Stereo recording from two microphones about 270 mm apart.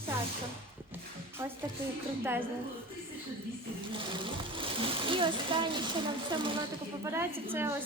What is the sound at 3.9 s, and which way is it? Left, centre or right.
A woman's voice, centre.